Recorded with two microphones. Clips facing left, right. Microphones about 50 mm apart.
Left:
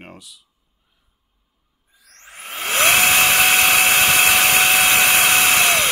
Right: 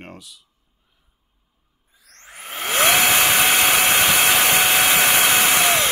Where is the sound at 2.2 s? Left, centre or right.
Left.